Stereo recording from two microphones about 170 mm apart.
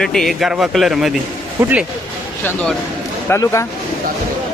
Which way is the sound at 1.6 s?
15° right (ahead or behind).